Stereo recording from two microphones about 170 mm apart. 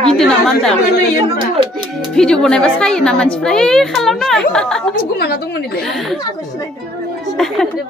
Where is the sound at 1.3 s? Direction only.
30° right (ahead or behind).